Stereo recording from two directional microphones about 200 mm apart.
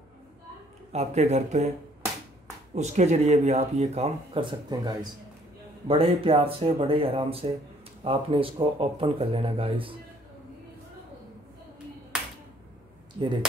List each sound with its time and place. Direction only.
0.9 s speech: 35° right (ahead or behind)
2.7 s speech: 35° right (ahead or behind)